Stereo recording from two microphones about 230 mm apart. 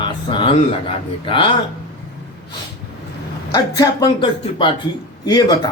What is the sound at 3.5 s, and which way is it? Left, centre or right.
Speech, centre.